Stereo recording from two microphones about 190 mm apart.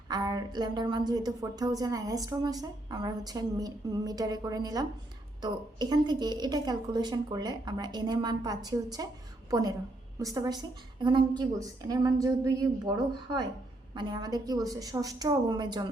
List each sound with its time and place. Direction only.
0.1 s a woman's voice: 20° right (ahead or behind)
13.9 s a woman's voice: 20° right (ahead or behind)